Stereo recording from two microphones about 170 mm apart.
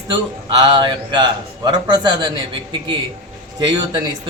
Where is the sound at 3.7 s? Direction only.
25° right (ahead or behind).